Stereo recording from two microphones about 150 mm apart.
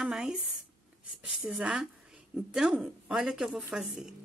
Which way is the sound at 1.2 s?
5° right (ahead or behind).